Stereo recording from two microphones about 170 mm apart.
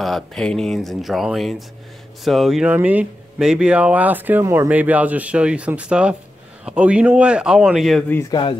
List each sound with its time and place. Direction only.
0.0 s speech: centre (ahead or behind)
8.2 s speech: 25° left (ahead or behind)